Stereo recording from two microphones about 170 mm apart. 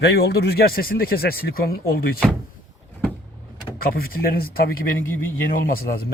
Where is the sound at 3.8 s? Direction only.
60° left (ahead or behind).